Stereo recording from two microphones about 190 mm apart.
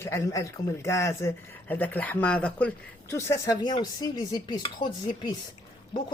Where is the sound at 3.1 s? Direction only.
15° left (ahead or behind).